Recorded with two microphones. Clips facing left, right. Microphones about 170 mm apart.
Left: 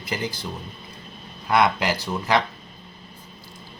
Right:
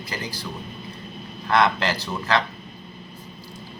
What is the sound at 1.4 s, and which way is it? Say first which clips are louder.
Speech: even; 10° left (ahead or behind).